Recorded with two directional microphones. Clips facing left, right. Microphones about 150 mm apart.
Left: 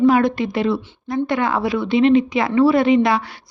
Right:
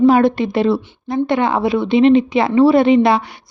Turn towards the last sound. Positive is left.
turn(degrees=-25)  # may be behind; listen again after turning